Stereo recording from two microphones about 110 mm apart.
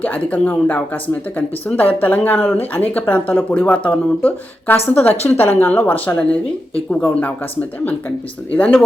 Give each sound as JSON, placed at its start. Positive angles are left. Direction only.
{"t": 0.0, "sound": "speech", "side_deg": 10}
{"t": 8.5, "sound": "speech", "side_deg": 10}